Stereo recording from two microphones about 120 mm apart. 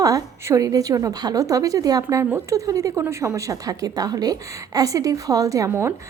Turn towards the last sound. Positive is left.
turn(degrees=-25)  # may be behind; listen again after turning